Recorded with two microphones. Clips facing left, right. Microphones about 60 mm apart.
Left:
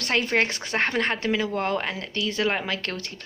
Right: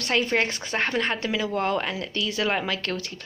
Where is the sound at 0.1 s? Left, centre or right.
Left.